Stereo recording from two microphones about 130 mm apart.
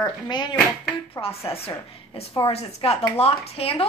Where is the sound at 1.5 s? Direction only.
50° left (ahead or behind).